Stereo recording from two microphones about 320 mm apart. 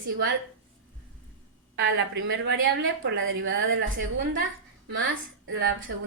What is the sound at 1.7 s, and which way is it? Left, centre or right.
A woman's voice, right.